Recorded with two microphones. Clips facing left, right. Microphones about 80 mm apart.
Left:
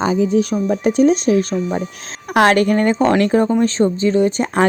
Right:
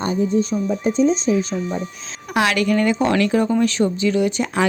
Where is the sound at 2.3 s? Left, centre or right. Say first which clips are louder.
Left 5 dB; left.